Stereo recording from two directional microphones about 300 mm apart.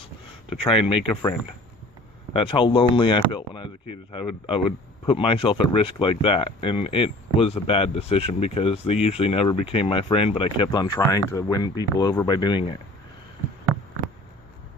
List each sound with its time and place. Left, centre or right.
0.5 s speech: centre
2.3 s speech: centre